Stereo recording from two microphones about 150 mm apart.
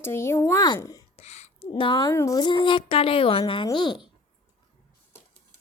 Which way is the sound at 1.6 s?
35° left (ahead or behind).